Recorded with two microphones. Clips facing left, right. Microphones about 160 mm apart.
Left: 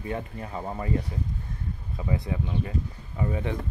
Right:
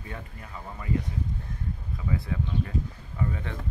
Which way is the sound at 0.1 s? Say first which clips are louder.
Left 9 dB; 35° left (ahead or behind).